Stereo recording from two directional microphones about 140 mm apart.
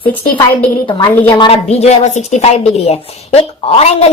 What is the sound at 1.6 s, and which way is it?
A woman's voice, 55° left (ahead or behind).